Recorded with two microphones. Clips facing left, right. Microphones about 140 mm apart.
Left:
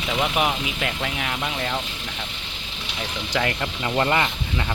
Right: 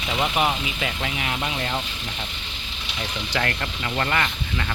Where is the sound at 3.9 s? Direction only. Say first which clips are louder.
Left 3 dB; 20° left (ahead or behind).